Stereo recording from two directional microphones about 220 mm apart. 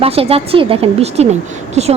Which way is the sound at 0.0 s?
25° right (ahead or behind).